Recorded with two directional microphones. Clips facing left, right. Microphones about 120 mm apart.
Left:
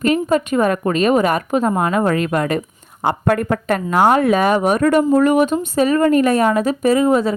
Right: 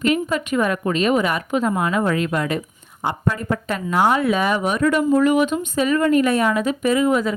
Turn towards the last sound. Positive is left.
turn(degrees=35)  # may be behind; listen again after turning